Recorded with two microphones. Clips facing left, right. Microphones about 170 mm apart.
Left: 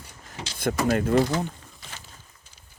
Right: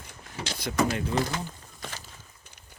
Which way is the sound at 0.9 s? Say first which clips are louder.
Left 7 dB; 50° left (ahead or behind).